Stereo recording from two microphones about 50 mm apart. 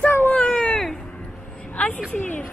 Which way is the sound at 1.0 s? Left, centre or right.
Centre.